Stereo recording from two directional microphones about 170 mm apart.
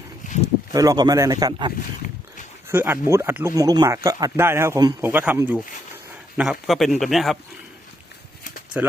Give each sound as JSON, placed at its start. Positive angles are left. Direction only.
{"t": 0.7, "sound": "a man's voice", "side_deg": -20}
{"t": 2.6, "sound": "a man's voice", "side_deg": -15}
{"t": 8.7, "sound": "speech", "side_deg": -10}